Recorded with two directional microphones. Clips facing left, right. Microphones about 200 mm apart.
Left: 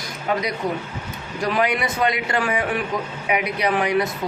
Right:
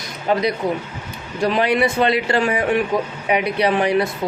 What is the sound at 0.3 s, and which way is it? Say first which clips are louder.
Speech: right 4 dB; 30° right (ahead or behind).